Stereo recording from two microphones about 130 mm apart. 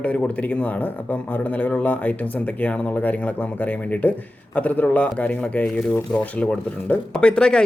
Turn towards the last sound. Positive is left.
turn(degrees=5)  # may be behind; listen again after turning